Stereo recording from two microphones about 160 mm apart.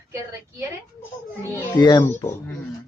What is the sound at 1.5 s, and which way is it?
Speech, 25° left (ahead or behind).